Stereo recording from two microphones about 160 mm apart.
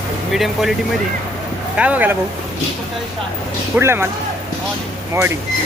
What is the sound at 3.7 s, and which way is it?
Speech, 15° right (ahead or behind).